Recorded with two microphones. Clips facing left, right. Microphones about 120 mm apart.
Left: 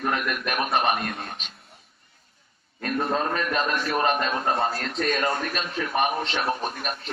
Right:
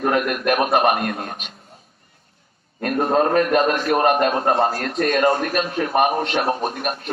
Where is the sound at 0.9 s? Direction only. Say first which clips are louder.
Right 6 dB; 60° right (ahead or behind).